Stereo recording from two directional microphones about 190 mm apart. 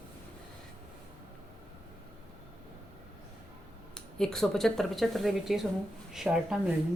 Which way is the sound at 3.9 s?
5° left (ahead or behind).